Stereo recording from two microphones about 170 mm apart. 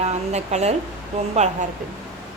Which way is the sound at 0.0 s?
40° right (ahead or behind).